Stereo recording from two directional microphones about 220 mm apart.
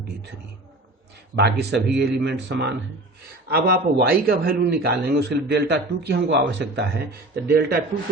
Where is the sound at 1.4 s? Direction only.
50° right (ahead or behind).